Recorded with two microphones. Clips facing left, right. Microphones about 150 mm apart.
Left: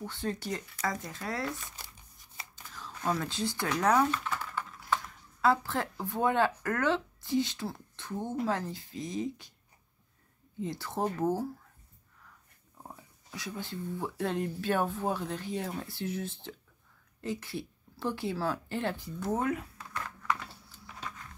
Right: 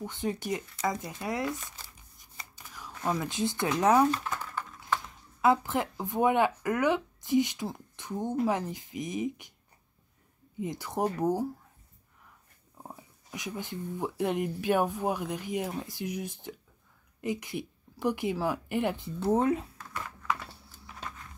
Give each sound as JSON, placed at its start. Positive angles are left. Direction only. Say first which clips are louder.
{"t": 0.0, "sound": "speech", "louder": "right 2 dB", "side_deg": -15}
{"t": 2.6, "sound": "speech", "louder": "right 1 dB", "side_deg": -10}
{"t": 10.6, "sound": "speech", "louder": "right 2 dB", "side_deg": -15}
{"t": 12.8, "sound": "speech", "louder": "right 2 dB", "side_deg": -20}